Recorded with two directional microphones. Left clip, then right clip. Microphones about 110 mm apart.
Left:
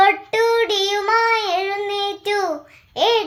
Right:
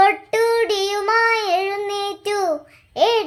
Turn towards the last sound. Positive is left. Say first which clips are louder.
# even
turn(degrees=-35)  # may be behind; listen again after turning